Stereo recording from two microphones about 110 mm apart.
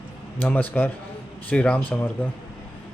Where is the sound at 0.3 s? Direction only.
15° left (ahead or behind).